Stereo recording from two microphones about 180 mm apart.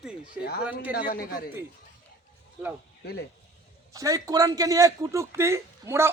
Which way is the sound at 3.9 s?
20° right (ahead or behind).